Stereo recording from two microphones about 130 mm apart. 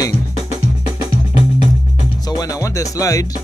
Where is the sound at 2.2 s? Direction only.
30° left (ahead or behind).